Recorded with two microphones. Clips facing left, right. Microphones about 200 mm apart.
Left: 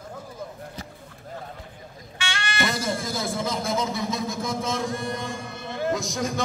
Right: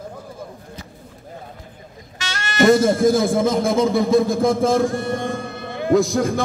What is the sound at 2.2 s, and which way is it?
A man's voice, 40° right (ahead or behind).